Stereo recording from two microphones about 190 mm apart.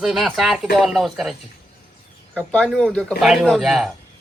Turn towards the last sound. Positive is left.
turn(degrees=0)  # may be behind; listen again after turning